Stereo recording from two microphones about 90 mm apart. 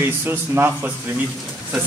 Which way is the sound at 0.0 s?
25° right (ahead or behind).